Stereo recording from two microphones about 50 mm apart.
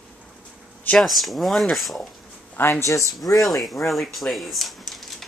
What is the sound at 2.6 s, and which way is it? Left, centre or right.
Speech, left.